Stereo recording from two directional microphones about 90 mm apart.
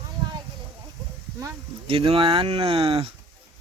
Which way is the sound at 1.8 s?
90° right.